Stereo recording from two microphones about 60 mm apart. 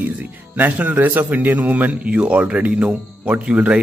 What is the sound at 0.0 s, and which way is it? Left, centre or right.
Speech, right.